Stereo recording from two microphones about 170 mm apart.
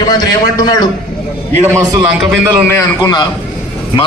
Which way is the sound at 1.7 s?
15° right (ahead or behind).